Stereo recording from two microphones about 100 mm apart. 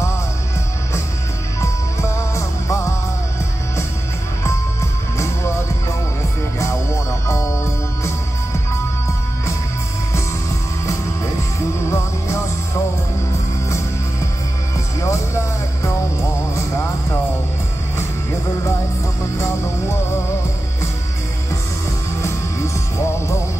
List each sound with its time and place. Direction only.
1.6 s music: 30° left (ahead or behind)
5.1 s music: 30° left (ahead or behind)
6.6 s music: 30° left (ahead or behind)
11.9 s music: 30° left (ahead or behind)
15.0 s music: 30° left (ahead or behind)
19.3 s music: 25° left (ahead or behind)